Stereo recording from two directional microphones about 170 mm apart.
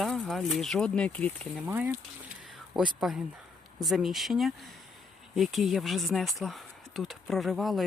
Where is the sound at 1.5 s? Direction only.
10° right (ahead or behind).